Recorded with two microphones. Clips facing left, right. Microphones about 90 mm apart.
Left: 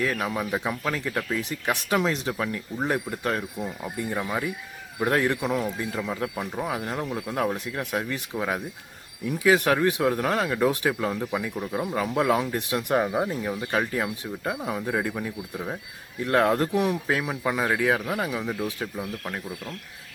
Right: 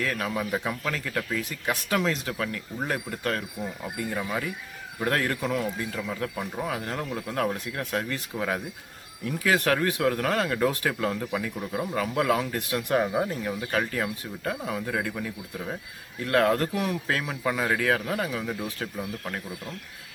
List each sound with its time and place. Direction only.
0.0 s speech: 20° left (ahead or behind)